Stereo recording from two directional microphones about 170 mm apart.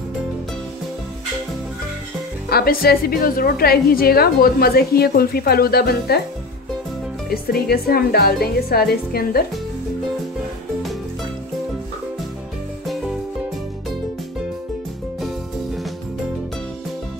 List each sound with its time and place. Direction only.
2.5 s a woman's voice: 60° left (ahead or behind)
7.2 s a woman's voice: 65° left (ahead or behind)